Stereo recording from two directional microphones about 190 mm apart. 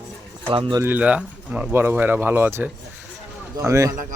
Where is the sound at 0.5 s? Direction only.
25° right (ahead or behind).